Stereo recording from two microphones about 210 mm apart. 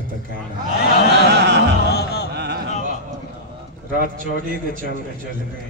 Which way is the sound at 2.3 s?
55° right (ahead or behind).